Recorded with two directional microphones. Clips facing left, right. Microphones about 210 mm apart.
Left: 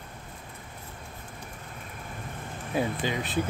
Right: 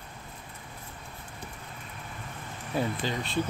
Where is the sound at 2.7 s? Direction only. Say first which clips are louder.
Left 2 dB; 15° left (ahead or behind).